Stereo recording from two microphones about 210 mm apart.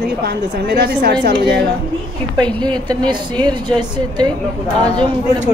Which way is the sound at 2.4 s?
5° left (ahead or behind).